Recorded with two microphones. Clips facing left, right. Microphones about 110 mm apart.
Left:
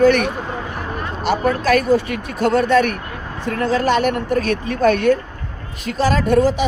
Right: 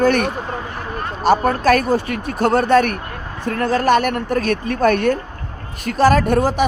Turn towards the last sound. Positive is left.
turn(degrees=-50)  # may be behind; listen again after turning